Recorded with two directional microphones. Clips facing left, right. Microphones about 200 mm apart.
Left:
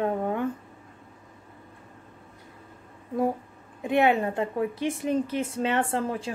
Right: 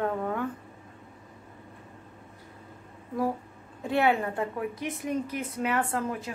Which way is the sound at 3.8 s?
20° left (ahead or behind).